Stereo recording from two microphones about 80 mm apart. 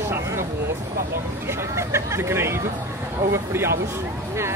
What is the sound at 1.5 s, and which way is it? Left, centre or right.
Speech, right.